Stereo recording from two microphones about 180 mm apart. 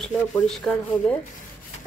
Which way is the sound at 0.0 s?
5° left (ahead or behind).